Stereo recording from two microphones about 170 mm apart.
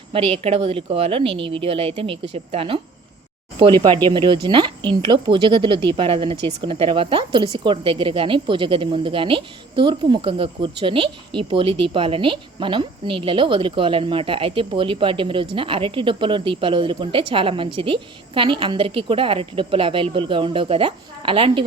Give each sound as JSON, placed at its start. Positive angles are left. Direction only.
{"t": 0.1, "sound": "speech", "side_deg": -35}